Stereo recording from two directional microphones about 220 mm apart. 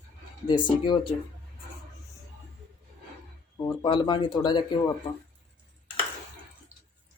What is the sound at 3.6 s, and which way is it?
Speech, 20° left (ahead or behind).